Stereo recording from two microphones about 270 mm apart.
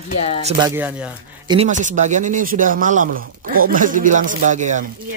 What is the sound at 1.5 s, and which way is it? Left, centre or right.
Speech, right.